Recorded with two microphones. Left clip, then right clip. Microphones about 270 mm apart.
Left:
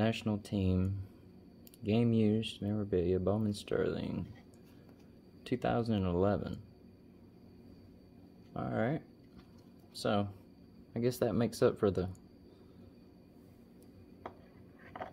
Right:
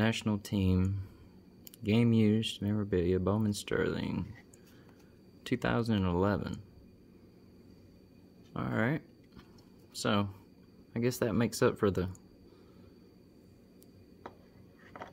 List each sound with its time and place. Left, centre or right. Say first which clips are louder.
0.0 s speech: right 2 dB; centre
5.4 s speech: right 1 dB; centre
8.5 s speech: right 2 dB; right